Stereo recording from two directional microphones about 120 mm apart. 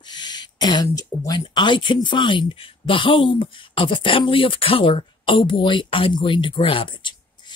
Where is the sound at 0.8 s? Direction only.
30° left (ahead or behind).